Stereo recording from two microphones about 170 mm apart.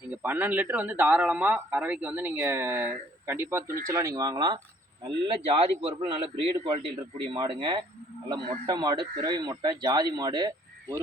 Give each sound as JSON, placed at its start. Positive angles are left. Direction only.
{"t": 0.1, "sound": "a man's voice", "side_deg": -10}